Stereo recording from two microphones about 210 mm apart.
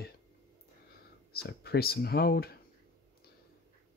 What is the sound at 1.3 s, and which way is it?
Speech, 45° left (ahead or behind).